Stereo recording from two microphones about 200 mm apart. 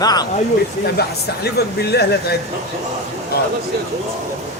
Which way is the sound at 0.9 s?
55° left (ahead or behind).